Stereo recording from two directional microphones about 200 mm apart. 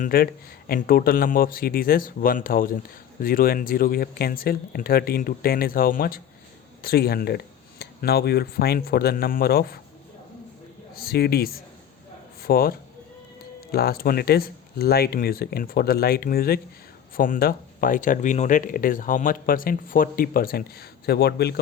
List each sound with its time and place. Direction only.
0.0 s speech: 45° left (ahead or behind)
10.9 s a man's voice: 50° left (ahead or behind)